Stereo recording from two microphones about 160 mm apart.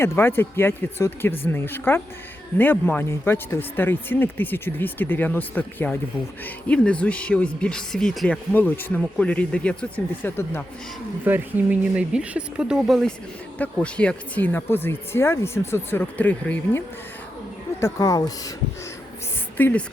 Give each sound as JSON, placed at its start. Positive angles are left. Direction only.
{"t": 0.0, "sound": "speech", "side_deg": 15}
{"t": 11.3, "sound": "speech", "side_deg": -10}
{"t": 17.7, "sound": "speech", "side_deg": 20}
{"t": 19.5, "sound": "speech", "side_deg": 10}